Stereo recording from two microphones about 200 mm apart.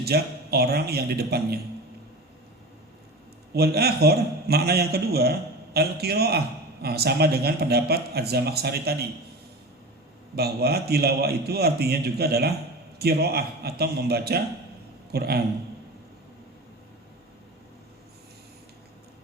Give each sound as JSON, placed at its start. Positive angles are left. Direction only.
{"t": 0.0, "sound": "a man's voice", "side_deg": -50}
{"t": 3.5, "sound": "a man's voice", "side_deg": -50}
{"t": 10.3, "sound": "a man's voice", "side_deg": -50}